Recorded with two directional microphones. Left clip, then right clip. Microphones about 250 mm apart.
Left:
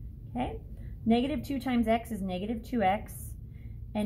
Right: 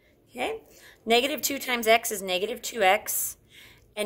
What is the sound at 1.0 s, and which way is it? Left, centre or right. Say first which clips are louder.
A woman's voice: right 6 dB; right.